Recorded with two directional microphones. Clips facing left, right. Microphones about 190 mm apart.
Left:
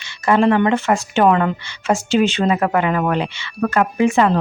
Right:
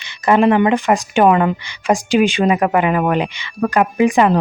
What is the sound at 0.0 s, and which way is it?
A woman's voice, 15° right (ahead or behind).